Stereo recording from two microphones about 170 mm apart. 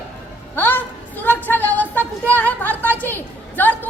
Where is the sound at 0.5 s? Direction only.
10° left (ahead or behind).